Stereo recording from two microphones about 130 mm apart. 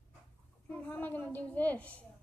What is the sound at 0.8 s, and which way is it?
A woman's voice, 15° left (ahead or behind).